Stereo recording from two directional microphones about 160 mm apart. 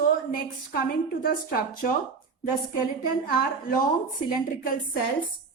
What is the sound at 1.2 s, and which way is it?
Speech, 65° left (ahead or behind).